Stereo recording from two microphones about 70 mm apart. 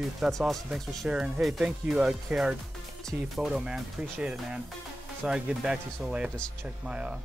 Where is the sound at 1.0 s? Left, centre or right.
Centre.